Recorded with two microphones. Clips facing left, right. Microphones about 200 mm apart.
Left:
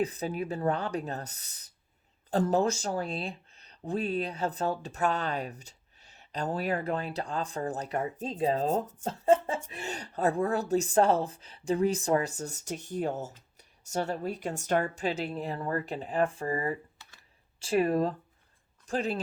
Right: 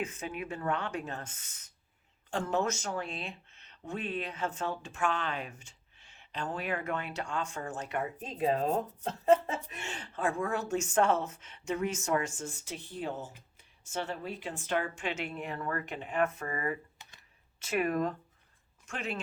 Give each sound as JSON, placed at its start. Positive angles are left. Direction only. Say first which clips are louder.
{"t": 0.0, "sound": "speech", "louder": "left 6 dB", "side_deg": 35}